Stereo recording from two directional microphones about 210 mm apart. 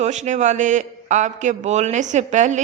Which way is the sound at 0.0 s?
35° right (ahead or behind).